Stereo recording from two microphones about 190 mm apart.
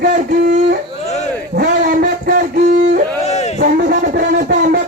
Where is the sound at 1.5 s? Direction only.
55° right (ahead or behind).